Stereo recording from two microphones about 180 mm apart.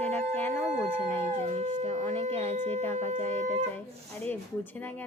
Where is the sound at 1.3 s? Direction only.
40° right (ahead or behind).